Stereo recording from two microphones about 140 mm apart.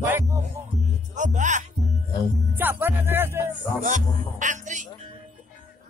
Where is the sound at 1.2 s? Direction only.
60° right (ahead or behind).